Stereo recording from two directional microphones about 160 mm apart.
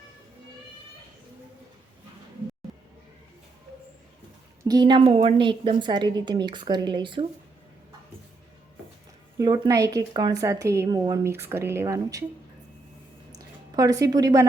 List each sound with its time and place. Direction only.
4.7 s a woman's voice: 30° right (ahead or behind)
9.4 s a woman's voice: 25° right (ahead or behind)
13.7 s a woman's voice: 20° right (ahead or behind)